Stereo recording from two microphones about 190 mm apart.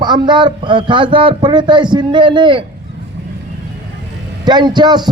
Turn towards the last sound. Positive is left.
turn(degrees=-20)  # may be behind; listen again after turning